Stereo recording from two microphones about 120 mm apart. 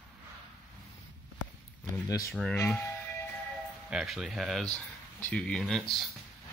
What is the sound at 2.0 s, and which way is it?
Speech, 30° left (ahead or behind).